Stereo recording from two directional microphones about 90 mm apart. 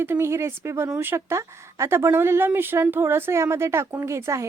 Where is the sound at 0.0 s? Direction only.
25° right (ahead or behind).